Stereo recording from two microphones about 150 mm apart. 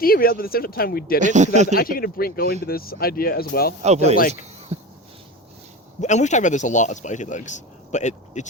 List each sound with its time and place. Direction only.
0.0 s speech: 80° left
1.2 s speech: 55° right (ahead or behind)
1.7 s speech: 75° left (ahead or behind)
3.8 s speech: 45° right (ahead or behind)
4.7 s a sound: 45° right (ahead or behind)
6.0 s speech: 50° left (ahead or behind)